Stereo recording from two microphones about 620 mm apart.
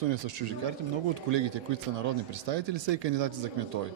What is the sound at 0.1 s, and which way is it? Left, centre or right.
A man's voice, right.